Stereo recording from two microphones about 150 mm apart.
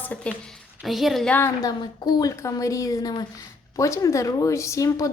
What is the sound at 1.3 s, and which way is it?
A woman's voice, 15° left (ahead or behind).